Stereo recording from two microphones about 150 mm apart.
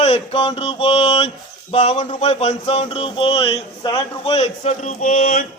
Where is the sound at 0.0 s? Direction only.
40° left (ahead or behind).